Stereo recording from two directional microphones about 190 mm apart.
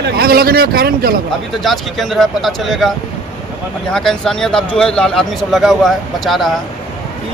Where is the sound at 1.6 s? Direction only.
Centre (ahead or behind).